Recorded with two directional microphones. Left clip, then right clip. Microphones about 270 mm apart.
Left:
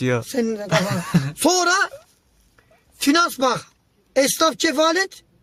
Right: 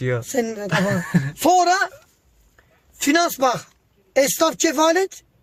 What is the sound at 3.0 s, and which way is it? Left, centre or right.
Speech, centre.